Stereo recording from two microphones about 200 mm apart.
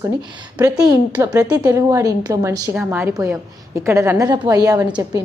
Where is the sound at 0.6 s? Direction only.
20° right (ahead or behind).